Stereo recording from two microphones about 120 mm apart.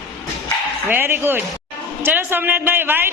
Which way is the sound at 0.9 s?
20° right (ahead or behind).